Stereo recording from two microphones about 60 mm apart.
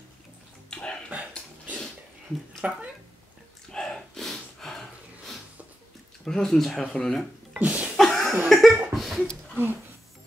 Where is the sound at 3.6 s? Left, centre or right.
Centre.